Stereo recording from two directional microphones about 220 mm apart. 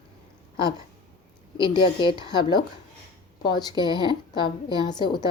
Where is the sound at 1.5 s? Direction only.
20° left (ahead or behind).